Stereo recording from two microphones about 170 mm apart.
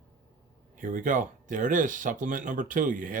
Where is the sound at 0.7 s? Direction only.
50° right (ahead or behind).